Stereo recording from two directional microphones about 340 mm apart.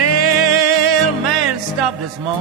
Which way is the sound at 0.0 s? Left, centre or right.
Right.